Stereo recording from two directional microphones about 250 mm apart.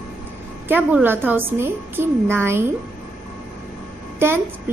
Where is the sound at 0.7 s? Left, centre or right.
Centre.